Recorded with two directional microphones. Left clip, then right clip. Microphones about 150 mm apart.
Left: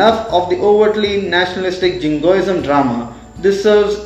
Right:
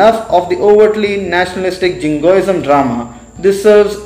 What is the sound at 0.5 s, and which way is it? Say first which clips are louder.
A man's voice: right 4 dB; 20° right (ahead or behind).